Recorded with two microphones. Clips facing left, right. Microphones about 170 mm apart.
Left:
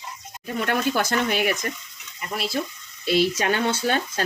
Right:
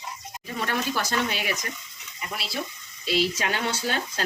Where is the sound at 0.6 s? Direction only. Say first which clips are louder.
Left 5 dB; 55° left (ahead or behind).